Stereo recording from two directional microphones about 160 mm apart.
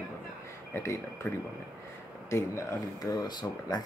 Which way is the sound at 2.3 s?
15° left (ahead or behind).